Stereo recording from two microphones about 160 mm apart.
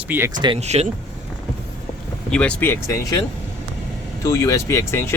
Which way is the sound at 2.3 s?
5° left (ahead or behind).